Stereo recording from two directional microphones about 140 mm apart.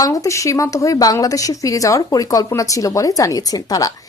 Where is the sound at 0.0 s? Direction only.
25° left (ahead or behind).